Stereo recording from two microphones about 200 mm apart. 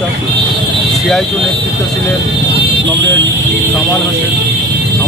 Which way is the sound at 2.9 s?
65° right (ahead or behind).